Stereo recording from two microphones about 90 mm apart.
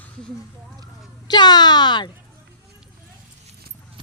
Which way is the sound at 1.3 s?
50° left (ahead or behind).